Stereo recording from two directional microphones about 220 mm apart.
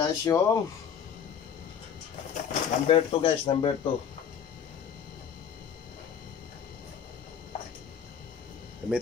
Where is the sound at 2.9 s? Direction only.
25° left (ahead or behind).